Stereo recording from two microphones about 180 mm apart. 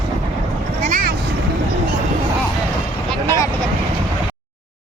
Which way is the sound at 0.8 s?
50° right (ahead or behind).